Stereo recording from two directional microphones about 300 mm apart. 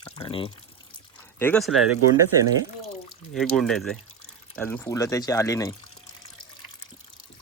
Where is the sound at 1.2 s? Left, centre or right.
Centre.